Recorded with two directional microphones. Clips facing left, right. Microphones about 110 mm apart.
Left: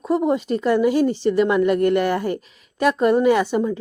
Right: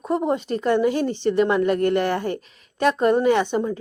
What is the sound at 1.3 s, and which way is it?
A woman's voice, 35° right (ahead or behind).